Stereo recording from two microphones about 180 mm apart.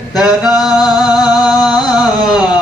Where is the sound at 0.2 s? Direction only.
Centre (ahead or behind).